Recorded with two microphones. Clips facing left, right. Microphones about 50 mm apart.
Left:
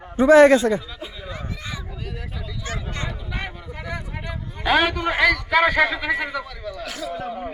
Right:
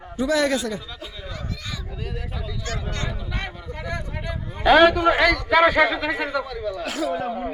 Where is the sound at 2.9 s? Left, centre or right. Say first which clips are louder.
Even; centre.